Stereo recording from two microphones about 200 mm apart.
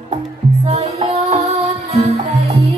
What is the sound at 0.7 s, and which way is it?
Music, 30° right (ahead or behind).